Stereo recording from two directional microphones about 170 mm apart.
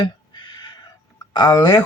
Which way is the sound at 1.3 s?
25° left (ahead or behind).